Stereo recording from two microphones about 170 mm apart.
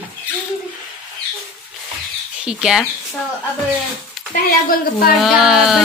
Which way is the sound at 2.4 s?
5° right (ahead or behind).